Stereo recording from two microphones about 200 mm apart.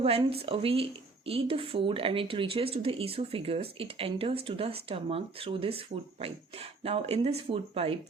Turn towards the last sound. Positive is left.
turn(degrees=-30)  # may be behind; listen again after turning